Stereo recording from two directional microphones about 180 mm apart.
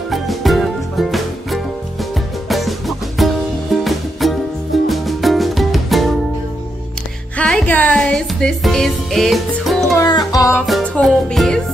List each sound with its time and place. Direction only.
0.1 s music: centre (ahead or behind)
7.3 s music: 5° left (ahead or behind)
9.9 s music: 20° left (ahead or behind)
10.7 s music: centre (ahead or behind)